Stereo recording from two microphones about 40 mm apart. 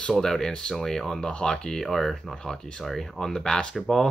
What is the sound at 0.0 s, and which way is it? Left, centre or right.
Speech, centre.